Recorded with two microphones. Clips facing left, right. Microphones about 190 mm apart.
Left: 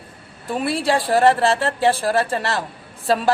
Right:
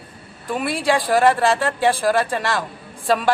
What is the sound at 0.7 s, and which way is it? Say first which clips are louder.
Speech: even; 30° left (ahead or behind).